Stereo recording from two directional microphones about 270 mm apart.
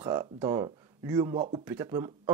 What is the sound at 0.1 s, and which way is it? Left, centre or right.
Speech, centre.